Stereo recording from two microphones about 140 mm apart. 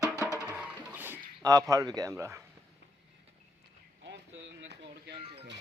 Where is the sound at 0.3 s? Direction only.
20° left (ahead or behind).